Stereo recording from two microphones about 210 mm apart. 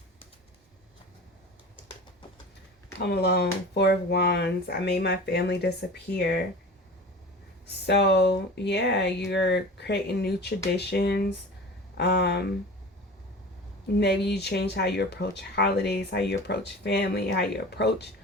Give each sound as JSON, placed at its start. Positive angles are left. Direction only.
{"t": 3.0, "sound": "speech", "side_deg": 50}
{"t": 7.9, "sound": "speech", "side_deg": 55}
{"t": 14.0, "sound": "speech", "side_deg": 50}